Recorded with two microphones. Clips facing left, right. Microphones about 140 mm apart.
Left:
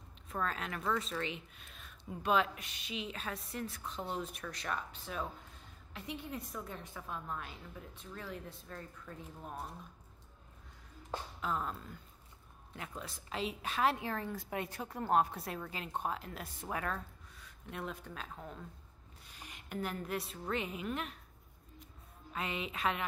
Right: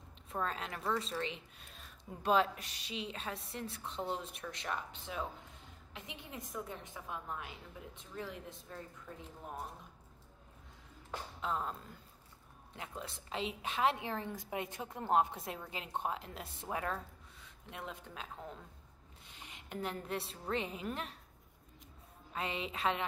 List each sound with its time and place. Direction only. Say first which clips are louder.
0.3 s a woman's voice: left 1 dB; 25° right (ahead or behind)
11.4 s a woman's voice: even; 25° right (ahead or behind)
12.7 s a woman's voice: even; 25° right (ahead or behind)
22.3 s a woman's voice: even; 30° right (ahead or behind)